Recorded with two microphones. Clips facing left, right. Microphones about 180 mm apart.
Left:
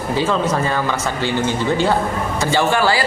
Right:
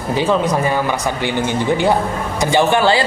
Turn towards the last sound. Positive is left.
turn(degrees=-20)  # may be behind; listen again after turning